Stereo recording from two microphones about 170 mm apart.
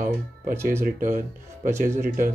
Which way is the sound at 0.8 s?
50° right (ahead or behind).